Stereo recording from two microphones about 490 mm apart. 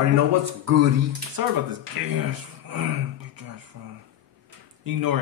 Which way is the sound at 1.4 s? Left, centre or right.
Right.